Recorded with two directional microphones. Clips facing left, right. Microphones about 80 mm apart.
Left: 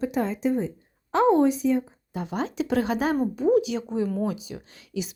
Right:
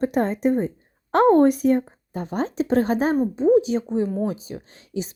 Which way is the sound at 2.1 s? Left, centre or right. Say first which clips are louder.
Right 3 dB; right.